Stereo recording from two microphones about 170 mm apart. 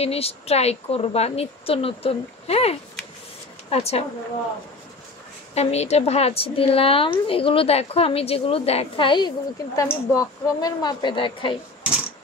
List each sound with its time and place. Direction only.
0.0 s a woman's voice: 35° left (ahead or behind)
5.5 s a woman's voice: 40° left (ahead or behind)